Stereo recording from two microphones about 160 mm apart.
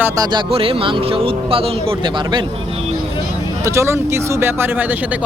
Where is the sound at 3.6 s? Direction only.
15° right (ahead or behind).